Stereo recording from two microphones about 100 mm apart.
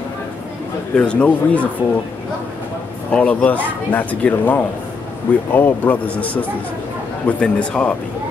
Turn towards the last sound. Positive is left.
turn(degrees=10)  # may be behind; listen again after turning